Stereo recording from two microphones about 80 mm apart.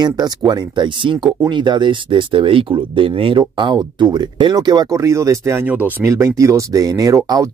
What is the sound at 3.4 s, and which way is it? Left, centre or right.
Speech, right.